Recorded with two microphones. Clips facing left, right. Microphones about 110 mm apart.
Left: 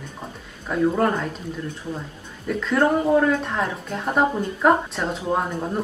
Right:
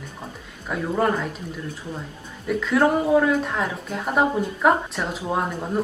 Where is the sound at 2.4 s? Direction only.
5° right (ahead or behind).